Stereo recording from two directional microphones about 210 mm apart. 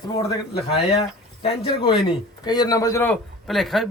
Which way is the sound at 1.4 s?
25° left (ahead or behind).